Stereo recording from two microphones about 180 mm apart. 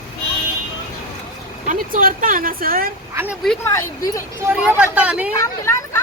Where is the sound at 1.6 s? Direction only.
50° right (ahead or behind).